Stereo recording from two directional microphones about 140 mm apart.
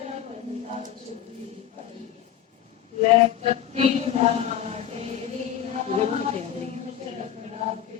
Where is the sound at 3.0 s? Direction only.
50° right (ahead or behind).